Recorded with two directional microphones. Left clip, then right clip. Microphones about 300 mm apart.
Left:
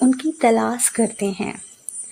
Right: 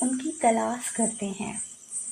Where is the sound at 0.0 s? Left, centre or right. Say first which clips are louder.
Left 7 dB; left.